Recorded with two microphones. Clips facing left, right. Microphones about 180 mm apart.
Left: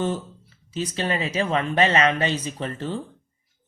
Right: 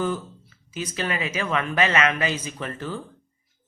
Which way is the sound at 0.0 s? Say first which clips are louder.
Left 1 dB; 30° left (ahead or behind).